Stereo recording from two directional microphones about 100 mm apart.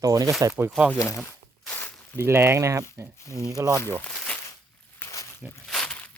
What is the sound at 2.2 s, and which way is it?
Speech, 25° right (ahead or behind).